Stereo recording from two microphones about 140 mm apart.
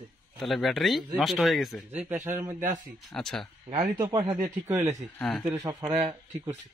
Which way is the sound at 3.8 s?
20° right (ahead or behind).